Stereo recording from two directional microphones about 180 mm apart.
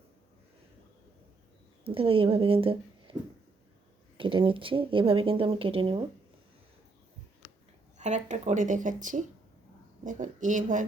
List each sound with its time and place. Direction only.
1.8 s speech: 30° right (ahead or behind)
4.2 s speech: 30° right (ahead or behind)
7.9 s speech: 40° right (ahead or behind)